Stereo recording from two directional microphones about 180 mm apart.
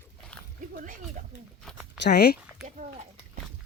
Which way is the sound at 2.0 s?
60° left (ahead or behind).